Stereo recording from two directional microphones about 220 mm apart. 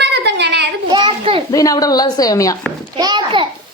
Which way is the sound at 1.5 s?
15° left (ahead or behind).